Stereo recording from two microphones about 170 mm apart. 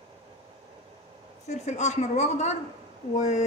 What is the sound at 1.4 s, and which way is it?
Speech, 45° left (ahead or behind).